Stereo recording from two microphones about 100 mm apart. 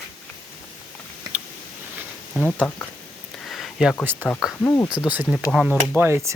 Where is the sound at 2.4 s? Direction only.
15° left (ahead or behind).